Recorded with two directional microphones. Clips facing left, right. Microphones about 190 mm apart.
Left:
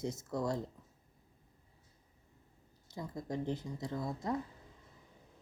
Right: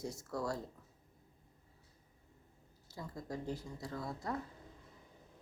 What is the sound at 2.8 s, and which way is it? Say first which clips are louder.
Speech: left 4 dB; 20° left (ahead or behind).